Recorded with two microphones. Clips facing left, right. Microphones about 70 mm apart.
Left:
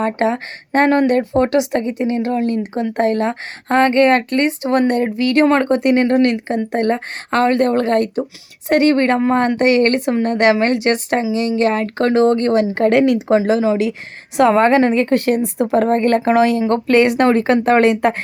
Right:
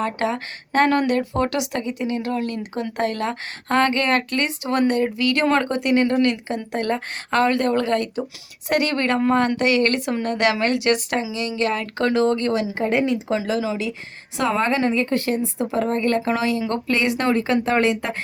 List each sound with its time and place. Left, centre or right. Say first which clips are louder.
0.0 s speech: left 6 dB; left
12.8 s speech: left 8 dB; left
13.3 s speech: left 8 dB; left
15.7 s speech: left 7 dB; left